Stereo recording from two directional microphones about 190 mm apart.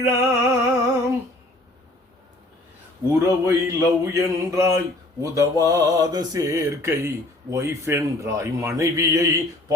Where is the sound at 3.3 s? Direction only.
15° right (ahead or behind).